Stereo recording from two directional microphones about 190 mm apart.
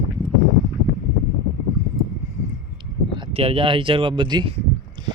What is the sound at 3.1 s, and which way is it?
Speech, 30° right (ahead or behind).